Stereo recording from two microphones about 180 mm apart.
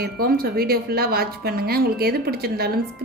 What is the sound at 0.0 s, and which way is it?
A woman's voice, 55° right (ahead or behind).